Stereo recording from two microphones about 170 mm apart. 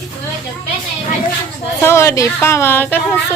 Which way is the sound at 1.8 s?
15° left (ahead or behind).